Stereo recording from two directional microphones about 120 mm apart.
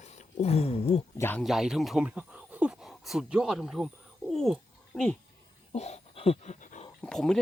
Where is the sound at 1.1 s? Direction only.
15° left (ahead or behind).